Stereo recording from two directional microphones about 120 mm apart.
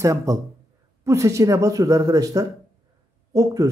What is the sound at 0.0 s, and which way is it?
Speech, 25° right (ahead or behind).